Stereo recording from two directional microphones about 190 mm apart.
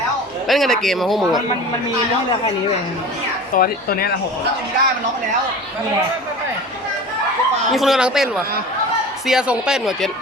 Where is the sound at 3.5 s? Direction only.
50° left (ahead or behind).